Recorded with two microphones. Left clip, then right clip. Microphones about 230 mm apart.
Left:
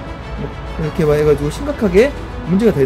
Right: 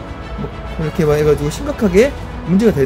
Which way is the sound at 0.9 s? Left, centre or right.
Centre.